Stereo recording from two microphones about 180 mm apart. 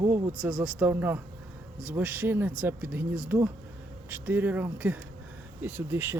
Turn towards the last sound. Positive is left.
turn(degrees=-10)  # may be behind; listen again after turning